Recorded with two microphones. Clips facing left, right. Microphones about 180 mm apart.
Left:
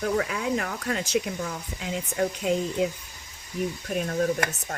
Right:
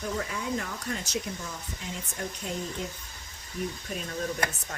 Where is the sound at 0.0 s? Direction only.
75° left (ahead or behind); by 2.6 s 90° left.